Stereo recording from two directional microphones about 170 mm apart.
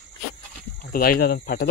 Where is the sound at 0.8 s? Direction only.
55° left (ahead or behind).